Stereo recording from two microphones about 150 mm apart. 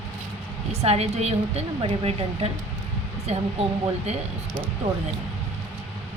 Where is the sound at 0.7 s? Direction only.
45° right (ahead or behind).